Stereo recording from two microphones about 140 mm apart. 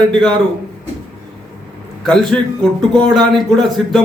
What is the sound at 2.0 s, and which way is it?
Speech, 5° left (ahead or behind).